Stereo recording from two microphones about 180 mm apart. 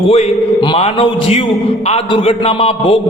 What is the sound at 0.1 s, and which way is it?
A man's voice, 30° left (ahead or behind).